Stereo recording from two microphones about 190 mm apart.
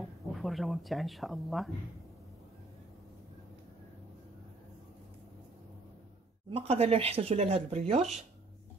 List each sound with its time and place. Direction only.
0.0 s speech: centre (ahead or behind)
6.5 s speech: 30° right (ahead or behind)